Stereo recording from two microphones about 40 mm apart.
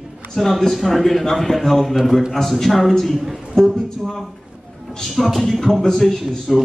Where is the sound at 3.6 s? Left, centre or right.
Centre.